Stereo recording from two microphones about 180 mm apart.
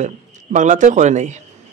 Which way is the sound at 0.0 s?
40° right (ahead or behind).